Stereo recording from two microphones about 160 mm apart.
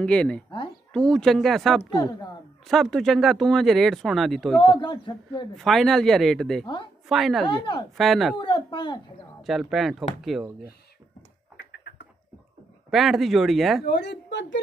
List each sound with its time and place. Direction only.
0.0 s speech: 5° left (ahead or behind)
4.7 s a man's voice: 30° left (ahead or behind)
5.6 s speech: centre (ahead or behind)
7.4 s speech: 30° left (ahead or behind)
8.0 s speech: centre (ahead or behind)
8.4 s a sound: 30° left (ahead or behind)
9.4 s speech: centre (ahead or behind)
11.5 s a sound: 90° left
12.9 s speech: centre (ahead or behind)
13.8 s a woman's voice: 90° left